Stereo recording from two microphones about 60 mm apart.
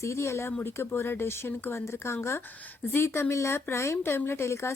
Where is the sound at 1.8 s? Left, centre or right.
Left.